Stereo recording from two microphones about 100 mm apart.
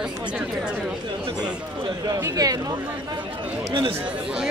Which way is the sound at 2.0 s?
35° right (ahead or behind).